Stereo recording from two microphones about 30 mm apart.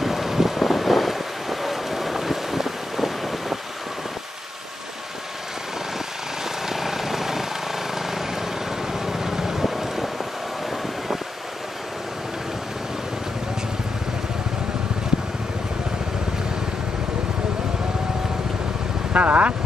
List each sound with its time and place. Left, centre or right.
0.0 s boat: centre
6.4 s vehicle: centre
19.1 s vehicle: right